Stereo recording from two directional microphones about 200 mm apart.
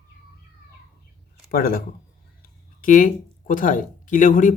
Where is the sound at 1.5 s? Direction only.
45° left (ahead or behind).